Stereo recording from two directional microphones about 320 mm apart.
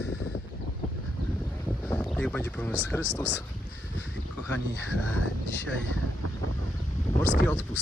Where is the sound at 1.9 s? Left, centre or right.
Centre.